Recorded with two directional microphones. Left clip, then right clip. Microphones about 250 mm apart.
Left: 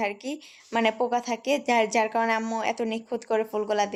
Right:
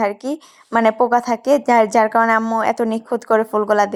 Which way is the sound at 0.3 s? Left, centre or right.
Right.